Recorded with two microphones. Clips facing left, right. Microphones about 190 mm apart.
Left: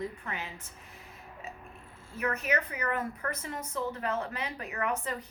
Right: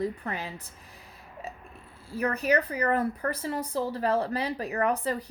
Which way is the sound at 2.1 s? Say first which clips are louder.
Right 5 dB; 35° right (ahead or behind).